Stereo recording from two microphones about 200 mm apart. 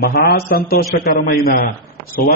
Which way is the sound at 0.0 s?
50° left (ahead or behind).